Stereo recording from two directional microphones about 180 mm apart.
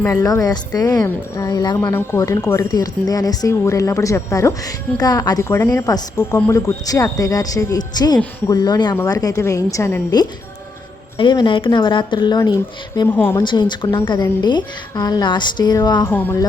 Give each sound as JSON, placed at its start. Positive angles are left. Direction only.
{"t": 0.1, "sound": "a woman's voice", "side_deg": 20}
{"t": 13.1, "sound": "speech", "side_deg": 10}
{"t": 13.4, "sound": "a woman's voice", "side_deg": 25}
{"t": 16.1, "sound": "speech", "side_deg": 10}